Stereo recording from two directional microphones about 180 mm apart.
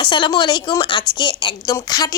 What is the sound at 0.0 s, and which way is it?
Speech, 25° left (ahead or behind).